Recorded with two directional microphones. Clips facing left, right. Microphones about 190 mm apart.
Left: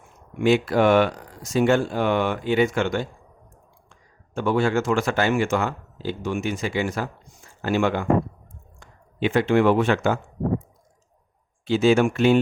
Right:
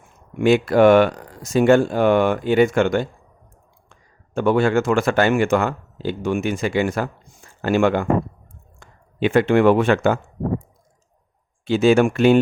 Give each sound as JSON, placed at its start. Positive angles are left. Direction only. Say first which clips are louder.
{"t": 0.4, "sound": "speech", "louder": "right 5 dB", "side_deg": -50}
{"t": 4.4, "sound": "speech", "louder": "right 4 dB", "side_deg": -60}
{"t": 11.6, "sound": "speech", "louder": "right 3 dB", "side_deg": -55}